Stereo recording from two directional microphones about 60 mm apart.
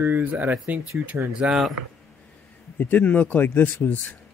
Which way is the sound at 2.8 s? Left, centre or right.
Left.